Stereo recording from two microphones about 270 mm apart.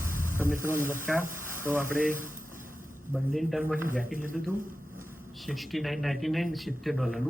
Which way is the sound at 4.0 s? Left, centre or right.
Right.